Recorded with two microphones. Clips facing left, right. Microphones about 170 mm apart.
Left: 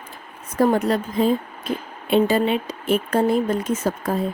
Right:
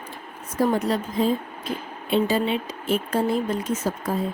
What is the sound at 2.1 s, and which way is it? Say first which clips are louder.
Speech: left 4 dB; 55° left (ahead or behind).